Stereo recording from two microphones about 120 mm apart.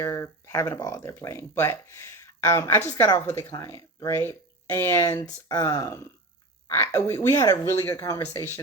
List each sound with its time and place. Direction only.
0.0 s speech: 25° left (ahead or behind)
3.5 s speech: 30° left (ahead or behind)
7.3 s speech: 30° left (ahead or behind)